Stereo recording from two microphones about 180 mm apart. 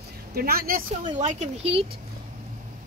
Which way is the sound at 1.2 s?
40° right (ahead or behind).